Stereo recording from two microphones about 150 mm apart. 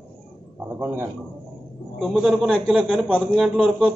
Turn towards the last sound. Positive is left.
turn(degrees=-5)  # may be behind; listen again after turning